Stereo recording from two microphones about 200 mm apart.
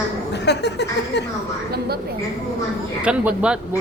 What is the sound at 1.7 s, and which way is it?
Speech, 50° right (ahead or behind).